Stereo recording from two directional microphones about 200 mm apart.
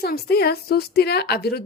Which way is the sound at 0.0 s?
50° left (ahead or behind).